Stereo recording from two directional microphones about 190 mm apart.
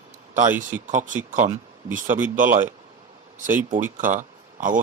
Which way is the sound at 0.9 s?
40° right (ahead or behind).